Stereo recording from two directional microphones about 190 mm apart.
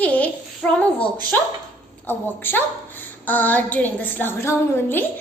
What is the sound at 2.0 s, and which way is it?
A woman's voice, 10° left (ahead or behind).